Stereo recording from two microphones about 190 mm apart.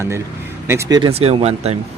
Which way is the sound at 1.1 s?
30° right (ahead or behind).